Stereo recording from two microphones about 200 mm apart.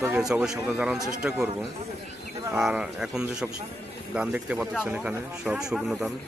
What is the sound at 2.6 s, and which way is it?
Speech, 5° right (ahead or behind).